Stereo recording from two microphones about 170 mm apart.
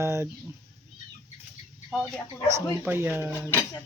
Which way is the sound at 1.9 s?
5° right (ahead or behind).